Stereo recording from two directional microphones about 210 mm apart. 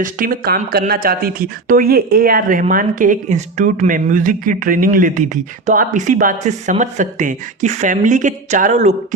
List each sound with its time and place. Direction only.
0.0 s speech: 40° right (ahead or behind)